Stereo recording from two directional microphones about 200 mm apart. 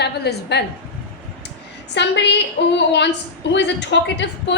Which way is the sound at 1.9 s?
60° left (ahead or behind).